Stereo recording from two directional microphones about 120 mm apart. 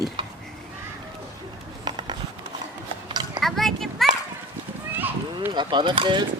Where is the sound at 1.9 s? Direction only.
35° right (ahead or behind).